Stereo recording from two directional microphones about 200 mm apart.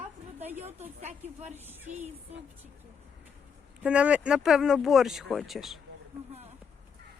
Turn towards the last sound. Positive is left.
turn(degrees=0)  # may be behind; listen again after turning